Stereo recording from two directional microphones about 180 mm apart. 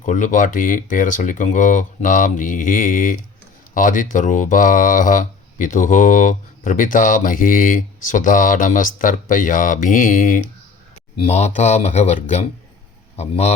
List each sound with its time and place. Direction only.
0.0 s speech: 45° left (ahead or behind)